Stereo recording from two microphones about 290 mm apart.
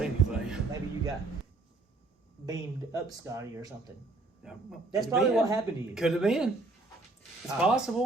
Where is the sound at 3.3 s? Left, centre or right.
Centre.